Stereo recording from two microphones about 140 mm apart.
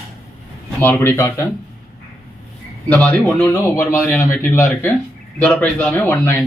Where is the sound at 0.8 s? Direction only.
15° left (ahead or behind).